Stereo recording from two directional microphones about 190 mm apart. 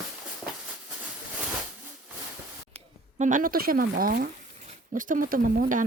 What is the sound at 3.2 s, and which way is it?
Speech, 40° right (ahead or behind).